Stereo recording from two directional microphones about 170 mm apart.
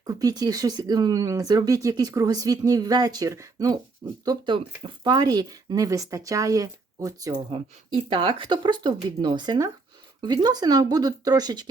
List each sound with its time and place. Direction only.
0.0 s speech: 20° right (ahead or behind)